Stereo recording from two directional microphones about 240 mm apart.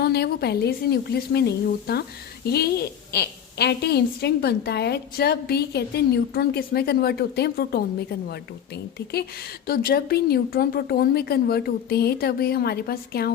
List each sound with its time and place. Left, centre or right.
0.0 s a woman's voice: left
9.6 s a woman's voice: left